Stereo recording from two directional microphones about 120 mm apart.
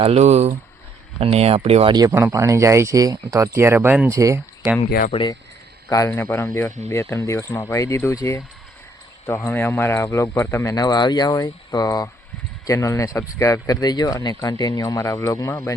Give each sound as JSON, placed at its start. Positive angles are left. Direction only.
{"t": 0.0, "sound": "speech", "side_deg": -60}
{"t": 1.2, "sound": "speech", "side_deg": -55}
{"t": 2.0, "sound": "speech", "side_deg": -25}
{"t": 4.1, "sound": "speech", "side_deg": -25}
{"t": 5.9, "sound": "speech", "side_deg": 25}